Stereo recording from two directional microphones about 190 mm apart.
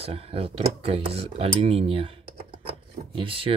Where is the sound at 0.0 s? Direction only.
30° right (ahead or behind).